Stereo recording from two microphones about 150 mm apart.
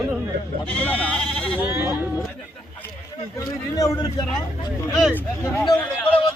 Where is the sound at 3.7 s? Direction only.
25° left (ahead or behind).